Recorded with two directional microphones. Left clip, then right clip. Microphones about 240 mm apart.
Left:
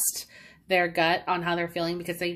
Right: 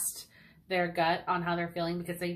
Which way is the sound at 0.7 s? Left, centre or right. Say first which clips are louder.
Left 5 dB; left.